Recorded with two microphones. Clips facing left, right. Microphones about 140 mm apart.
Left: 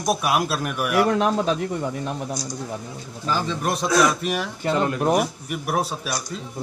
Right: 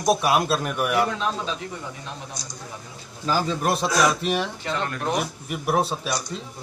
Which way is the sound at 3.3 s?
30° right (ahead or behind).